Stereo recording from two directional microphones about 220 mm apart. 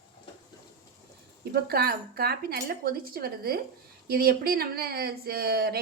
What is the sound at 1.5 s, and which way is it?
Speech, 45° right (ahead or behind).